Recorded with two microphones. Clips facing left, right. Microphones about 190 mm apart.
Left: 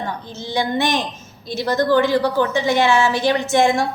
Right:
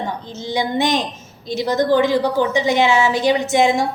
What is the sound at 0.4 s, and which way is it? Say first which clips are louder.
A woman's voice: right 1 dB; 20° right (ahead or behind).